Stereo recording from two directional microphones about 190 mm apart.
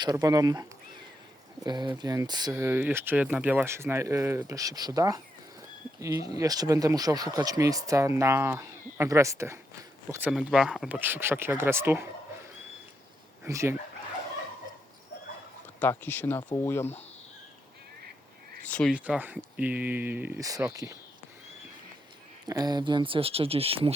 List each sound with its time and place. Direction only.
0.0 s speech: 20° right (ahead or behind)
1.6 s speech: 25° right (ahead or behind)
13.4 s speech: 15° right (ahead or behind)
15.8 s speech: 10° left (ahead or behind)
18.6 s speech: 5° left (ahead or behind)
18.9 s speech: 5° right (ahead or behind)
22.4 s speech: 20° right (ahead or behind)